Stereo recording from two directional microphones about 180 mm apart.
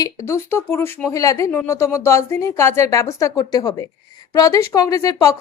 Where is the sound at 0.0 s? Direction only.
15° left (ahead or behind).